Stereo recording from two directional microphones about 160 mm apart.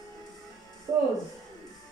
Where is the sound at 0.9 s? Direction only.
20° right (ahead or behind).